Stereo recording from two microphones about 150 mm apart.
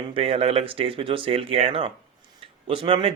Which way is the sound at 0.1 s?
40° right (ahead or behind).